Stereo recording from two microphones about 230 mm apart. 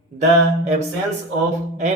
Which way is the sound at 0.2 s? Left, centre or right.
Right.